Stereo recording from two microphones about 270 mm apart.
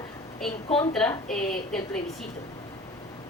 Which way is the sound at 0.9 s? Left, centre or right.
Centre.